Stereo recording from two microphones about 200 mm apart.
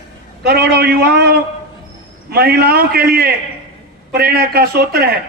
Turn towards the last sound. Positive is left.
turn(degrees=-50)  # may be behind; listen again after turning